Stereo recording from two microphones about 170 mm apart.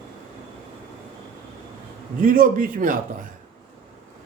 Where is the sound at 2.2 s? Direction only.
55° right (ahead or behind).